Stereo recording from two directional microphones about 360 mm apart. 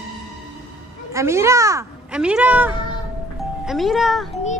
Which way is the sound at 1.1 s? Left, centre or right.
Centre.